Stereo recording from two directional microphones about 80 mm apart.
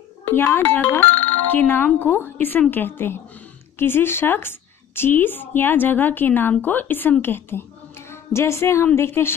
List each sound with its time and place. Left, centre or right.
0.3 s a woman's voice: left